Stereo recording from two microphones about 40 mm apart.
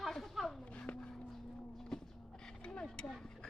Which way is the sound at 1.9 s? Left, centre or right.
Centre.